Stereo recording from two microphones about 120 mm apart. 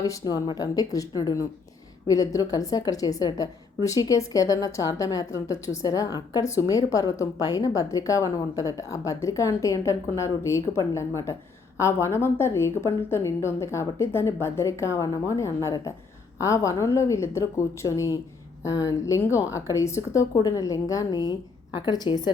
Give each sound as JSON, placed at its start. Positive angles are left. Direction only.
{"t": 0.0, "sound": "a woman's voice", "side_deg": 30}